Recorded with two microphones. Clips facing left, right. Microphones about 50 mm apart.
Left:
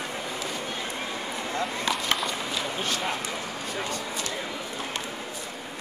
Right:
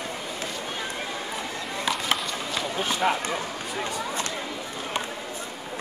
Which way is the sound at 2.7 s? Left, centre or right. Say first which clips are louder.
Right 8 dB; centre.